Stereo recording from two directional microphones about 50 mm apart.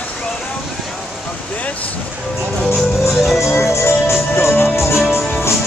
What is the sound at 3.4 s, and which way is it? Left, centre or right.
Music, left.